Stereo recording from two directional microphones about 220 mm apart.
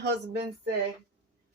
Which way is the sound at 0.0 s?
50° right (ahead or behind).